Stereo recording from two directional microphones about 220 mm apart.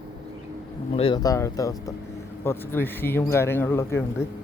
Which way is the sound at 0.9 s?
20° left (ahead or behind).